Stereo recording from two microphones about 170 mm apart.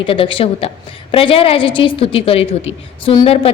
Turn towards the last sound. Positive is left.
turn(degrees=35)  # may be behind; listen again after turning